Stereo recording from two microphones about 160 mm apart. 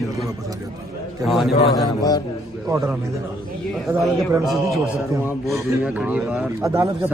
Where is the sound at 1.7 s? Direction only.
25° left (ahead or behind).